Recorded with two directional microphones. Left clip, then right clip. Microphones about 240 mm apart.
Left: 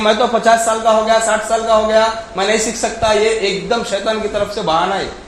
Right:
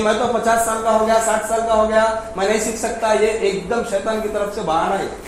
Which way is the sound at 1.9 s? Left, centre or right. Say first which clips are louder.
Left 3 dB; left.